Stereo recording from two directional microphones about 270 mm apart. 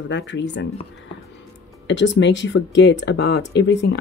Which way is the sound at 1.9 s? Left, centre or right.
Left.